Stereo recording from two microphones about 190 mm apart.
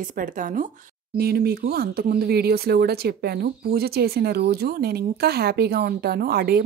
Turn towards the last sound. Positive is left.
turn(degrees=-55)  # may be behind; listen again after turning